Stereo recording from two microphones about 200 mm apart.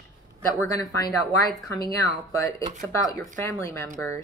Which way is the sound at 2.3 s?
15° left (ahead or behind).